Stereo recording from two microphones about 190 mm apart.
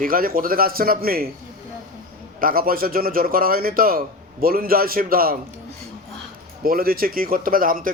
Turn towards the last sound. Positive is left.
turn(degrees=-45)  # may be behind; listen again after turning